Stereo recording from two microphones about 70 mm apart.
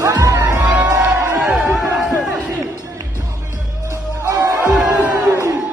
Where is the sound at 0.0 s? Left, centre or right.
Right.